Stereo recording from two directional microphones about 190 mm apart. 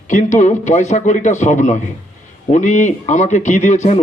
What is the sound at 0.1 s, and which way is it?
A man's voice, 40° left (ahead or behind).